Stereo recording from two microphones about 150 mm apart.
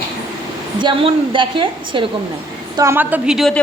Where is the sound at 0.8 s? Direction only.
35° right (ahead or behind).